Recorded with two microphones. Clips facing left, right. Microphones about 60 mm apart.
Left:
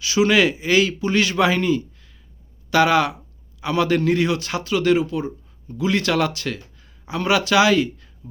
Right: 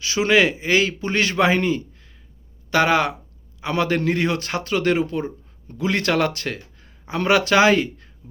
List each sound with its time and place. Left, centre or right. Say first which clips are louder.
0.0 s a man's voice: left 1 dB; right